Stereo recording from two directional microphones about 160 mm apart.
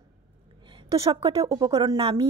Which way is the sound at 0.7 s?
30° right (ahead or behind).